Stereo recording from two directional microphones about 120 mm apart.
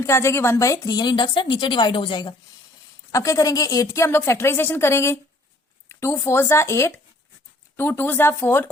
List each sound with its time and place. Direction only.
0.0 s speech: 20° left (ahead or behind); by 2.3 s 40° left (ahead or behind)
3.1 s a woman's voice: 25° left (ahead or behind)